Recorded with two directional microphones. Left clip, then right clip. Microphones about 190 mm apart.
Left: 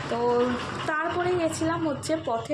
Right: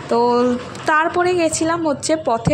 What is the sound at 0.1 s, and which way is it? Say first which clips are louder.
A woman's voice: right 9 dB; 40° right (ahead or behind).